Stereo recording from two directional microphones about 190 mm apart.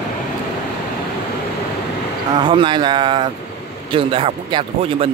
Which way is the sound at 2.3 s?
25° right (ahead or behind).